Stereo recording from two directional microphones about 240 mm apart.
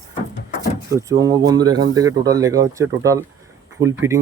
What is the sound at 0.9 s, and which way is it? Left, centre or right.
Speech, centre.